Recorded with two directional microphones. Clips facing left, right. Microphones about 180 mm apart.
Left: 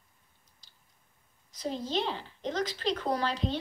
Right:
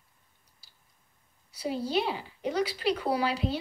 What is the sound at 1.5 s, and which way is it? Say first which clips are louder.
Speech: right 3 dB; 10° right (ahead or behind).